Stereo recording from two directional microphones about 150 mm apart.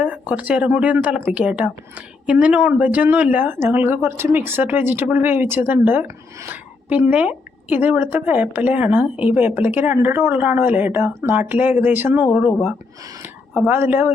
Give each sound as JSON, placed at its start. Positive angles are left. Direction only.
{"t": 0.0, "sound": "speech", "side_deg": -10}